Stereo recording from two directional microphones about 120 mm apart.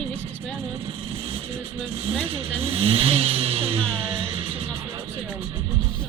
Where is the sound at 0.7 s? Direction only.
50° right (ahead or behind).